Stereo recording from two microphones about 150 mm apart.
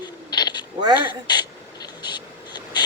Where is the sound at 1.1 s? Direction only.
30° left (ahead or behind).